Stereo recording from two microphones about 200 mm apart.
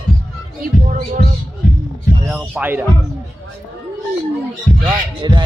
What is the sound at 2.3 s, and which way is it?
Speech, 5° right (ahead or behind).